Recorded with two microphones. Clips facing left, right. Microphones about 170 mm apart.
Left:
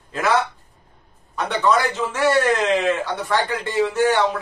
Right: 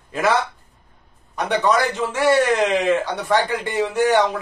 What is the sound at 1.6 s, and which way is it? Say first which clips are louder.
A man's voice: left 1 dB; 15° right (ahead or behind).